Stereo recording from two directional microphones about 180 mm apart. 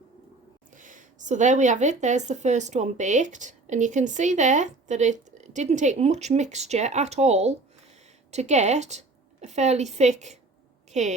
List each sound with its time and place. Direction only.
0.7 s a woman's voice: 45° right (ahead or behind)